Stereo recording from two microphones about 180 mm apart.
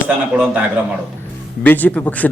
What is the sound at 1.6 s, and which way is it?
Speech, 10° left (ahead or behind).